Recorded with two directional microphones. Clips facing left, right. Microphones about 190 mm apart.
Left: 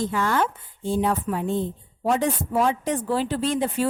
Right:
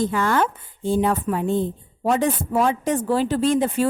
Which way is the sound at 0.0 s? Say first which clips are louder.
Right 3 dB; 55° right (ahead or behind).